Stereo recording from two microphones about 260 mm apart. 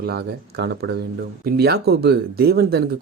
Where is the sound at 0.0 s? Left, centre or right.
Right.